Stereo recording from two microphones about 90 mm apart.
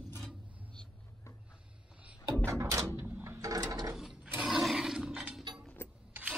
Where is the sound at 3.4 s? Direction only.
40° right (ahead or behind).